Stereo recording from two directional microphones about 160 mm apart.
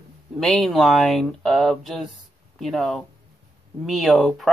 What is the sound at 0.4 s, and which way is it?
Speech, centre (ahead or behind).